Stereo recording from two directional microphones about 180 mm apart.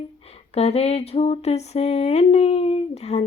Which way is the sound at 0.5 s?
35° left (ahead or behind).